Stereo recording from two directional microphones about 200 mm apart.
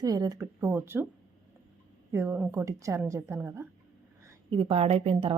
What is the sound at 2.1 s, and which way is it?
A woman's voice, 10° right (ahead or behind).